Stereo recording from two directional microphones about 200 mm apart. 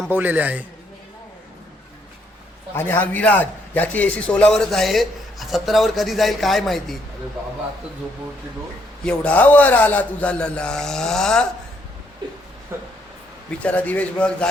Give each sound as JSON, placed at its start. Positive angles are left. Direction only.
{"t": 0.1, "sound": "a man's voice", "side_deg": -10}
{"t": 2.7, "sound": "a man's voice", "side_deg": 10}
{"t": 9.0, "sound": "a man's voice", "side_deg": 5}
{"t": 12.7, "sound": "speech", "side_deg": -10}
{"t": 13.5, "sound": "a man's voice", "side_deg": 5}